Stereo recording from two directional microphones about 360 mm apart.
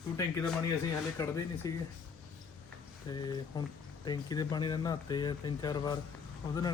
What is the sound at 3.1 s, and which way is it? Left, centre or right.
Speech, centre.